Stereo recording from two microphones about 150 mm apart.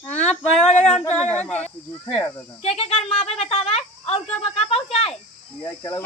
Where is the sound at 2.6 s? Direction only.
40° left (ahead or behind).